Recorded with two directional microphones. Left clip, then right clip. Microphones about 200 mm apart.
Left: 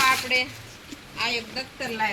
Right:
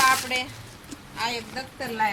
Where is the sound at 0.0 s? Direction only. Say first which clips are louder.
Even; centre (ahead or behind).